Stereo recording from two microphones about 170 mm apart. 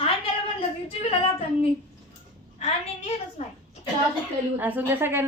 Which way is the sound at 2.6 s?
40° left (ahead or behind).